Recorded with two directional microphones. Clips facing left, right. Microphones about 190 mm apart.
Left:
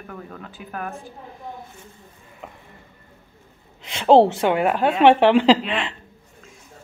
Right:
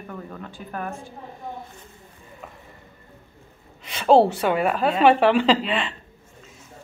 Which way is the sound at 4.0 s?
20° left (ahead or behind).